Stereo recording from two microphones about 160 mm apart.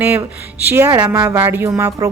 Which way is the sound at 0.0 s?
10° right (ahead or behind).